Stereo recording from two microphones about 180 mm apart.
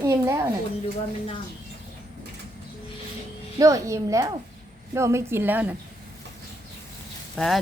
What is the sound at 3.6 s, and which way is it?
A woman's voice, 20° right (ahead or behind).